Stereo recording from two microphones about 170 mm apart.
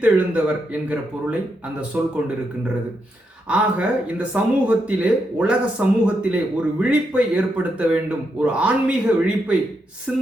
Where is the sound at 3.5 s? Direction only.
5° right (ahead or behind).